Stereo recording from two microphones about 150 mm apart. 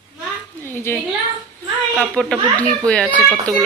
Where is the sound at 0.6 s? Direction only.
15° left (ahead or behind).